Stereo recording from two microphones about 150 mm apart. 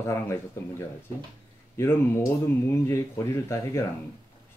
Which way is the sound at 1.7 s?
20° left (ahead or behind).